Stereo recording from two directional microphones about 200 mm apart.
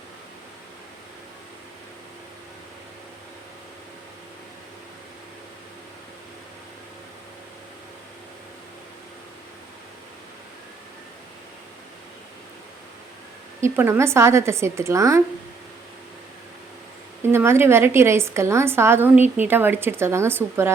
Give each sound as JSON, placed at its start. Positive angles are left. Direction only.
{"t": 13.6, "sound": "a woman's voice", "side_deg": -10}
{"t": 17.2, "sound": "a woman's voice", "side_deg": -10}